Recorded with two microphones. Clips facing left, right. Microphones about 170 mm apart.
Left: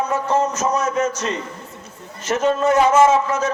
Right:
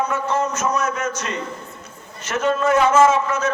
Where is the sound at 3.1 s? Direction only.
40° left (ahead or behind).